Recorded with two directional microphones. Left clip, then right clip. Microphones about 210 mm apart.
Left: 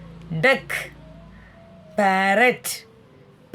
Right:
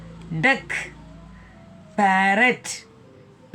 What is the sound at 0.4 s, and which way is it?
Speech, 55° left (ahead or behind).